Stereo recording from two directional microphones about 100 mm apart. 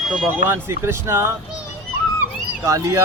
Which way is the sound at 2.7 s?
30° right (ahead or behind).